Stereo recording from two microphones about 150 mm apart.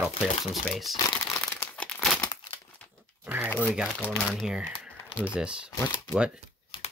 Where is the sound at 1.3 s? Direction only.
15° left (ahead or behind).